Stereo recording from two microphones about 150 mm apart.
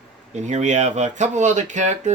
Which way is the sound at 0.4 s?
50° right (ahead or behind).